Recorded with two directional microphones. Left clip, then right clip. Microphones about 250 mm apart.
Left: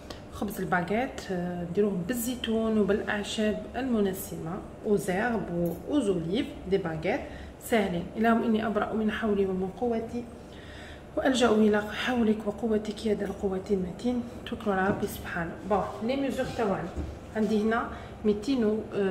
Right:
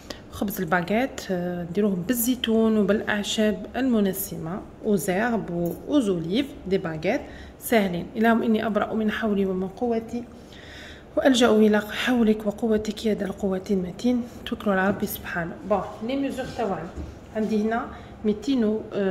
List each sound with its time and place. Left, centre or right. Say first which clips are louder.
0.4 s a woman's voice: right 4 dB; right
11.1 s a woman's voice: right 5 dB; right
16.1 s a woman's voice: right 2 dB; right